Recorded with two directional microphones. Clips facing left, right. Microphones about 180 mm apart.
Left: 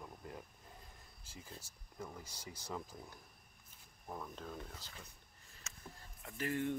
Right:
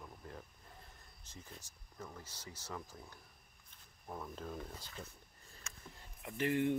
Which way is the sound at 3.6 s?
5° left (ahead or behind).